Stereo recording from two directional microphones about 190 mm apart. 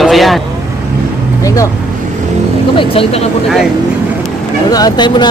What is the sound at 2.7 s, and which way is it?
Speech, 30° left (ahead or behind).